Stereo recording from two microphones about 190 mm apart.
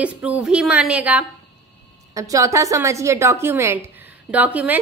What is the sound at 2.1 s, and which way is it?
A woman's voice, 15° right (ahead or behind).